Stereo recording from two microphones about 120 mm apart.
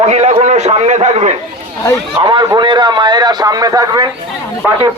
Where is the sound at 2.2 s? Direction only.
40° right (ahead or behind).